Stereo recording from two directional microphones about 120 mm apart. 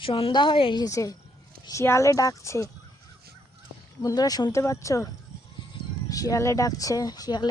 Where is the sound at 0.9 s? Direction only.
25° left (ahead or behind).